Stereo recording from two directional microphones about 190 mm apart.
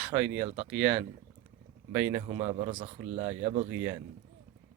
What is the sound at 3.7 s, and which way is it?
Speech, 10° right (ahead or behind).